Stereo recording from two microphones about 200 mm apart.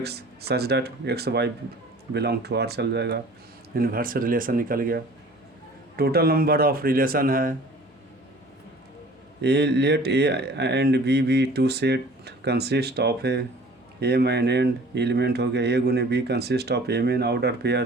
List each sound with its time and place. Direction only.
0.0 s speech: 55° right (ahead or behind)
9.4 s speech: 55° right (ahead or behind)